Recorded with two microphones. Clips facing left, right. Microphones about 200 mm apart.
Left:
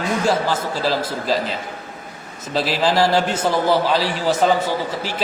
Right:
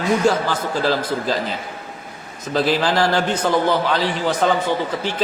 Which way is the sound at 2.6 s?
Centre (ahead or behind).